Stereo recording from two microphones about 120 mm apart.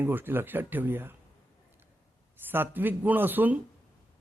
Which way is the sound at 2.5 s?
15° right (ahead or behind).